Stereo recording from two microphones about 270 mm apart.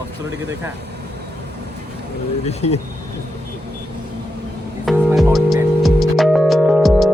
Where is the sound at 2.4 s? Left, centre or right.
Left.